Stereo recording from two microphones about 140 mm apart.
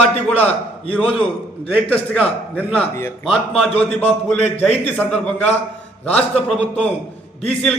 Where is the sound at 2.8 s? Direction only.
15° left (ahead or behind).